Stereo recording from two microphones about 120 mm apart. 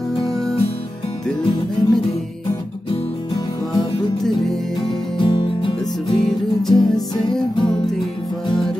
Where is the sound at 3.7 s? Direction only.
35° left (ahead or behind).